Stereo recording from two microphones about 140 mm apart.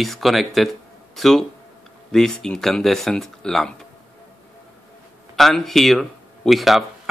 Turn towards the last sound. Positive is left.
turn(degrees=0)  # may be behind; listen again after turning